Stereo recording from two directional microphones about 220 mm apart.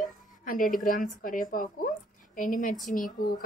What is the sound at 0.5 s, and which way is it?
Speech, 40° left (ahead or behind).